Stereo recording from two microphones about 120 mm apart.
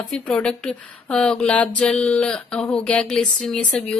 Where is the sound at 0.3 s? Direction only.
5° left (ahead or behind).